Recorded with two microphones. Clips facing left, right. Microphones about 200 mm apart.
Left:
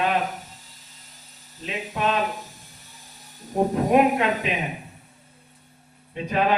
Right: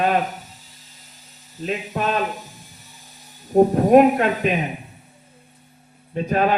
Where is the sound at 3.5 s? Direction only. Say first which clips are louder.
Right 6 dB; 45° right (ahead or behind).